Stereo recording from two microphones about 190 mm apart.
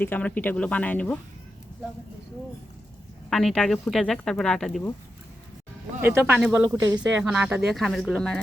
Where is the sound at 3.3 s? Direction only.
Centre (ahead or behind).